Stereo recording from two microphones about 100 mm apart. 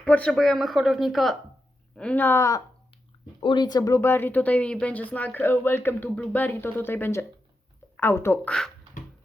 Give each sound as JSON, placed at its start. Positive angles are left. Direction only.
{"t": 0.0, "sound": "speech", "side_deg": 10}
{"t": 2.0, "sound": "speech", "side_deg": 15}
{"t": 3.4, "sound": "speech", "side_deg": 45}
{"t": 8.4, "sound": "speech", "side_deg": 5}